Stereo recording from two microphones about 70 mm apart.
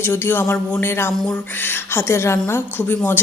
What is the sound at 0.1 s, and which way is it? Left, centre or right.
A woman's voice, left.